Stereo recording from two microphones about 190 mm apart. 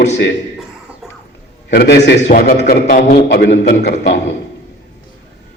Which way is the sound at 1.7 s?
60° left (ahead or behind).